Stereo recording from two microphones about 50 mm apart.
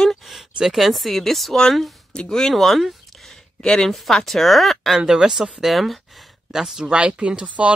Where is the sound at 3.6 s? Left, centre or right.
Centre.